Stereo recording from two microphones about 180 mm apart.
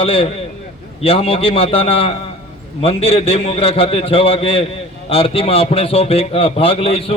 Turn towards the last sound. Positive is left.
turn(degrees=30)  # may be behind; listen again after turning